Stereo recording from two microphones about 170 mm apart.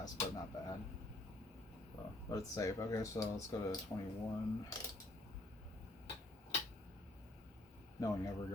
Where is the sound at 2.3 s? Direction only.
20° left (ahead or behind).